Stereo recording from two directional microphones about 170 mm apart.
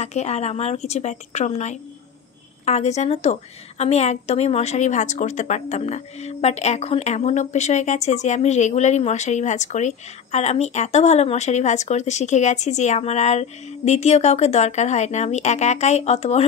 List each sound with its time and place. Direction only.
0.0 s a woman's voice: 40° left (ahead or behind)